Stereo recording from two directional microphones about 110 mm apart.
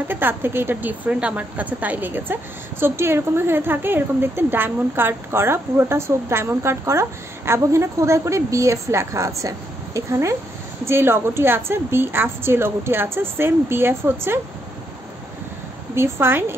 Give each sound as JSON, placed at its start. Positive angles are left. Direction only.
{"t": 0.1, "sound": "a woman's voice", "side_deg": -20}
{"t": 15.9, "sound": "a woman's voice", "side_deg": -20}